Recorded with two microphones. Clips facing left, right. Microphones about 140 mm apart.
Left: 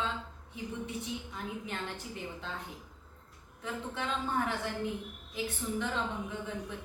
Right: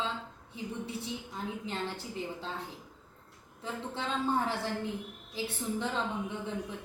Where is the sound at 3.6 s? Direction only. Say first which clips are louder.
Even; 30° right (ahead or behind).